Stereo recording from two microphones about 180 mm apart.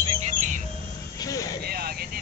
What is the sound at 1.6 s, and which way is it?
Vehicle, 60° right (ahead or behind).